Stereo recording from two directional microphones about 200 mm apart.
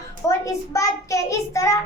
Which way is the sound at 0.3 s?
15° left (ahead or behind).